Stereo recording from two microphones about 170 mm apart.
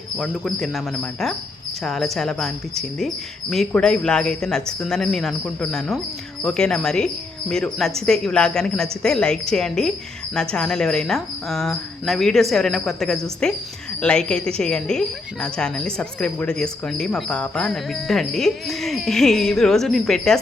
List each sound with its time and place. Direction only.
0.2 s speech: centre (ahead or behind)
1.8 s speech: centre (ahead or behind)